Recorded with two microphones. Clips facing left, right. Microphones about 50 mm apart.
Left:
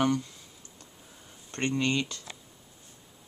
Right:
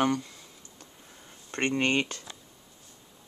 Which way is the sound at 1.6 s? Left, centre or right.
Right.